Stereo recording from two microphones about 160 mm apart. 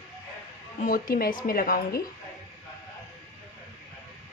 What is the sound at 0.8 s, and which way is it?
Speech, 60° left (ahead or behind).